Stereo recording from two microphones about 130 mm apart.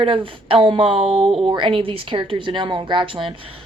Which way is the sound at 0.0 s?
40° right (ahead or behind).